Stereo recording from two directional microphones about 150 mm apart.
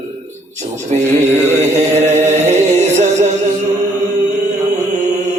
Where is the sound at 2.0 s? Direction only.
50° right (ahead or behind).